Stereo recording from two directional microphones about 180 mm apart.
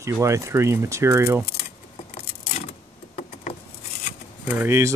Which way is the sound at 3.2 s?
50° left (ahead or behind).